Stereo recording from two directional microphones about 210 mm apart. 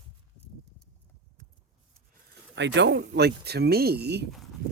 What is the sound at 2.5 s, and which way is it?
Speech, 60° right (ahead or behind).